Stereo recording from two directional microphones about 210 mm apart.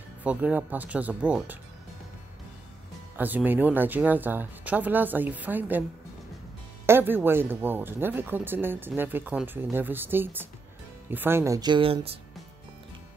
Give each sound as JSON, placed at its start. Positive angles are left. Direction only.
{"t": 0.2, "sound": "speech", "side_deg": -5}
{"t": 3.2, "sound": "speech", "side_deg": -10}
{"t": 6.9, "sound": "speech", "side_deg": -10}